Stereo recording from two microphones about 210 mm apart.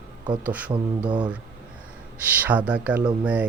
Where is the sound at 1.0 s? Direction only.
20° right (ahead or behind).